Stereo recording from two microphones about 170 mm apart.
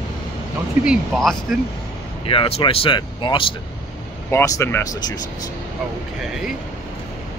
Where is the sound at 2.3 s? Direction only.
35° left (ahead or behind).